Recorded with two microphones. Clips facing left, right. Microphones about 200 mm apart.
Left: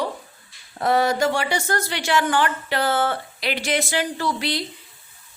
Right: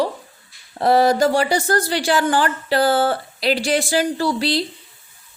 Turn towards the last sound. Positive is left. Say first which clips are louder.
# right 5 dB
turn(degrees=-30)  # may be behind; listen again after turning